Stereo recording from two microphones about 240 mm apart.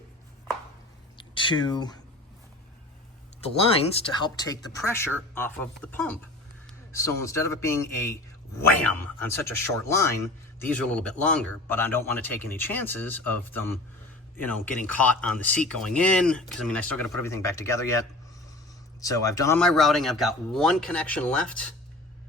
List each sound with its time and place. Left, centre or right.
1.2 s speech: centre
3.8 s speech: left
4.7 s a man's voice: centre